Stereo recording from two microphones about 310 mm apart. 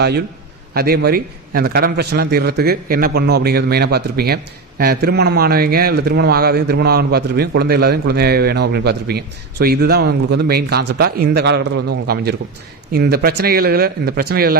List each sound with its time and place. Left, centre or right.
0.7 s a man's voice: right